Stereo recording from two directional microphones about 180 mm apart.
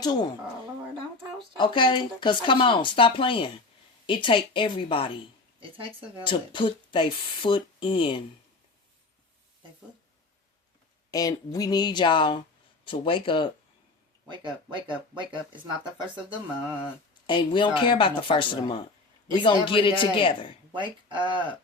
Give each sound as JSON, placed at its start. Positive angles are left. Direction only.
{"t": 1.5, "sound": "speech", "side_deg": 25}
{"t": 5.5, "sound": "speech", "side_deg": -30}
{"t": 6.2, "sound": "speech", "side_deg": 25}
{"t": 11.1, "sound": "speech", "side_deg": 20}
{"t": 14.3, "sound": "speech", "side_deg": -25}
{"t": 17.2, "sound": "speech", "side_deg": 25}
{"t": 20.7, "sound": "speech", "side_deg": -25}